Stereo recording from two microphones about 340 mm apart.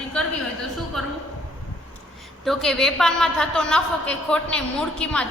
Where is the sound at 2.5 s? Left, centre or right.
Centre.